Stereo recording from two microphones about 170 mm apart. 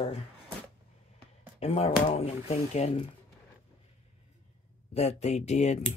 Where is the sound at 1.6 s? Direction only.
40° left (ahead or behind).